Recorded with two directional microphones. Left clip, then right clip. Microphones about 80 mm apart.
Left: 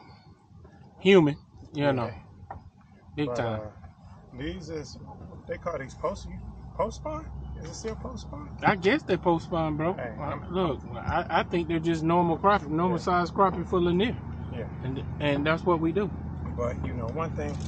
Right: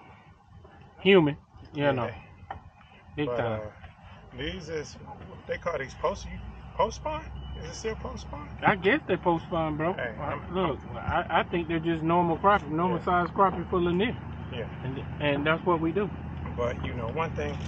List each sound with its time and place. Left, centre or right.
1.0 s speech: left
3.3 s speech: left
4.4 s speech: centre
8.5 s speech: left
13.7 s speech: left
14.5 s speech: centre
15.1 s speech: left
16.3 s speech: centre